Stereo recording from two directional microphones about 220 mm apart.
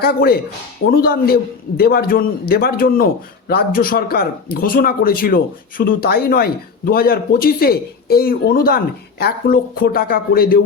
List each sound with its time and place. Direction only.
0.0 s speech: 45° left (ahead or behind)